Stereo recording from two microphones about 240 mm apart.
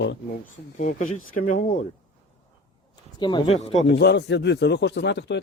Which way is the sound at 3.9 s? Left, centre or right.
Left.